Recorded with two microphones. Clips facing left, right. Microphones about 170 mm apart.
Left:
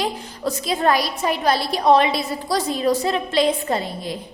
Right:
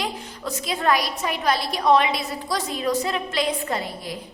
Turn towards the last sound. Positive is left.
turn(degrees=25)  # may be behind; listen again after turning